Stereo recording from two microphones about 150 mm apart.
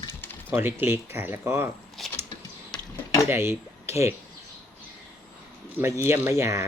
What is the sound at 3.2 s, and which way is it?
Speech, 15° right (ahead or behind).